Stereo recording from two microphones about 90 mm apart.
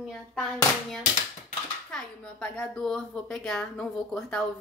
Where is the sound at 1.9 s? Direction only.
10° left (ahead or behind).